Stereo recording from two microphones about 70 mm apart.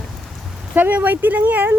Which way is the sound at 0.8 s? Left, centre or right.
Right.